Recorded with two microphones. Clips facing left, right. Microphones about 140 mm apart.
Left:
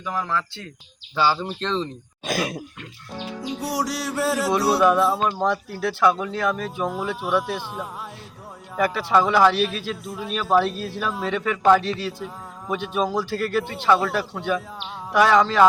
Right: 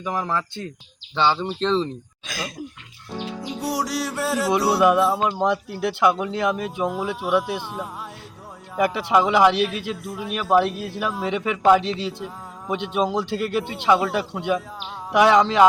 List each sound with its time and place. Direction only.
0.0 s speech: 15° right (ahead or behind)
1.1 s music: 5° left (ahead or behind)
2.2 s speech: 60° left (ahead or behind)
3.4 s music: centre (ahead or behind)
5.2 s speech: 15° right (ahead or behind)
6.8 s music: centre (ahead or behind)
8.8 s speech: 15° right (ahead or behind)
10.1 s music: 5° right (ahead or behind)
10.3 s speech: 15° right (ahead or behind)